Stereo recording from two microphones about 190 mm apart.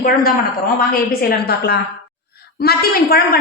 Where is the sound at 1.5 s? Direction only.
55° left (ahead or behind).